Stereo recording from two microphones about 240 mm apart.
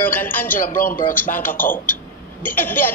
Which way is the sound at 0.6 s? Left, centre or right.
Left.